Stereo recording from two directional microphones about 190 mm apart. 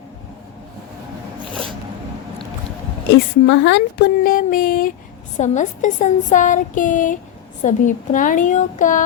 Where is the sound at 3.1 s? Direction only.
70° left (ahead or behind); by 9.0 s 45° left (ahead or behind).